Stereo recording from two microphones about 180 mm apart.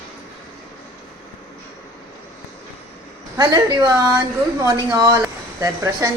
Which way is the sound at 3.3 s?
25° right (ahead or behind).